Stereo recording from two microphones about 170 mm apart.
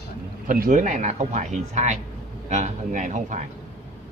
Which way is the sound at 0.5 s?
50° right (ahead or behind).